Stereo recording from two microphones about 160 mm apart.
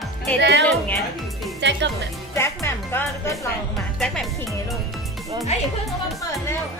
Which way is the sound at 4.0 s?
5° left (ahead or behind).